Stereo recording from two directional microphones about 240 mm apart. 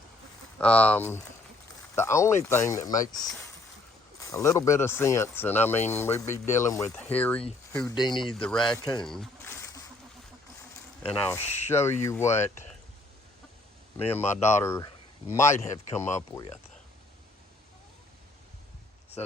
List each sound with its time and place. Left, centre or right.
0.6 s speech: centre
8.2 s speech: centre
8.8 s speech: centre
9.0 s a sound: centre
11.3 s speech: centre
13.9 s speech: centre